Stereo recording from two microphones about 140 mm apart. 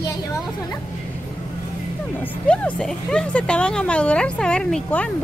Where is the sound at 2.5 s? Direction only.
5° left (ahead or behind).